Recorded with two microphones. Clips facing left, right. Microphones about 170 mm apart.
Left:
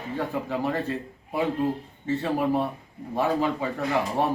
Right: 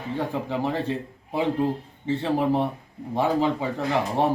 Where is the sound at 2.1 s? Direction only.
20° right (ahead or behind).